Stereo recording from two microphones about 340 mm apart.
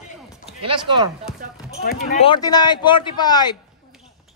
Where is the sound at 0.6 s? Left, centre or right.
Centre.